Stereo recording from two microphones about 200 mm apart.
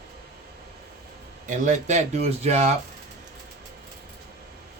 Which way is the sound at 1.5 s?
35° right (ahead or behind).